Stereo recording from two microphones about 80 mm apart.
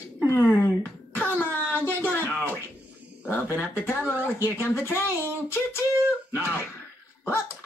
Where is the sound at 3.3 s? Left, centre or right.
Left.